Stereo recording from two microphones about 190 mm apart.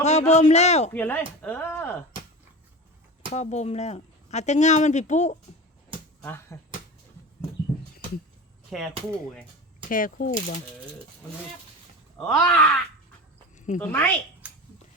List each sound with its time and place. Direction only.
0.0 s speech: 35° left (ahead or behind)
0.9 s speech: 10° left (ahead or behind)
3.3 s speech: 35° left (ahead or behind)
6.2 s speech: 15° left (ahead or behind)
8.7 s groan: centre (ahead or behind)
9.9 s speech: 45° left (ahead or behind)
12.1 s groan: 5° left (ahead or behind)
13.6 s a sound: 40° left (ahead or behind)
13.8 s speech: 10° left (ahead or behind)